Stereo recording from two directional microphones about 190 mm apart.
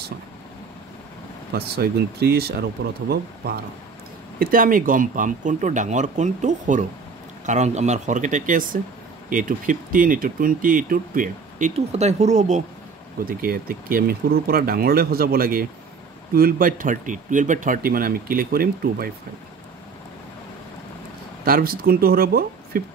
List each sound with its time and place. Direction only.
1.5 s speech: 55° right (ahead or behind); by 12.6 s 40° right (ahead or behind)
13.2 s speech: 50° right (ahead or behind)
21.5 s speech: 50° right (ahead or behind)